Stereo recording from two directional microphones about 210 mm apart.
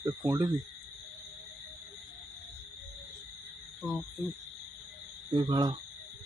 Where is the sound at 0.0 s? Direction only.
15° right (ahead or behind).